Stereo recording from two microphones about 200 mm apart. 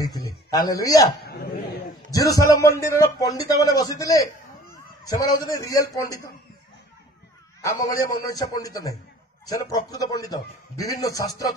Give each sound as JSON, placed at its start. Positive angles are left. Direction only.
{"t": 0.0, "sound": "a man's voice", "side_deg": 15}
{"t": 2.0, "sound": "a man's voice", "side_deg": 15}
{"t": 7.6, "sound": "a man's voice", "side_deg": 15}